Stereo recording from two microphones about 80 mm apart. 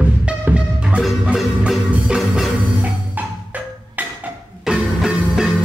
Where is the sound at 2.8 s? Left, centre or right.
Centre.